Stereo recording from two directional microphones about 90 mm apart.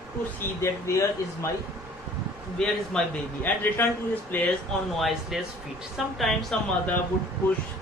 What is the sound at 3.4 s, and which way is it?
A man's voice, 20° left (ahead or behind).